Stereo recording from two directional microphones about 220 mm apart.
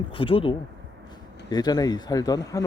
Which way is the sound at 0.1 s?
25° left (ahead or behind).